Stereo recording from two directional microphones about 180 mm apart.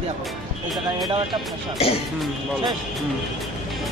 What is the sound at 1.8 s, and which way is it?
Speech, 35° left (ahead or behind).